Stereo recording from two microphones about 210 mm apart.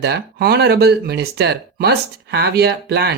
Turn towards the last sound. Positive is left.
turn(degrees=-50)  # may be behind; listen again after turning